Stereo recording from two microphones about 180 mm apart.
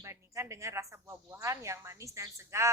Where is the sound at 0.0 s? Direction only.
15° right (ahead or behind).